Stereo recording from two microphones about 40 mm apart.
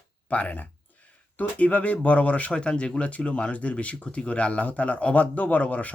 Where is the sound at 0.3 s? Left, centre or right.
Left.